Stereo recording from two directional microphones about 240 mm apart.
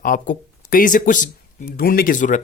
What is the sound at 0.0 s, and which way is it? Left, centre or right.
Speech, left.